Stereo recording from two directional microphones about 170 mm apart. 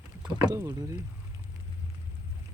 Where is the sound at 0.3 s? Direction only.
15° right (ahead or behind).